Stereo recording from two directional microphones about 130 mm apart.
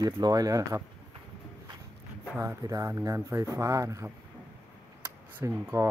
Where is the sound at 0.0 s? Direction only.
30° right (ahead or behind).